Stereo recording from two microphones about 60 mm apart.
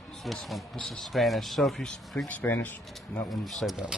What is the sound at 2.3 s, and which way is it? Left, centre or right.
Speech, left.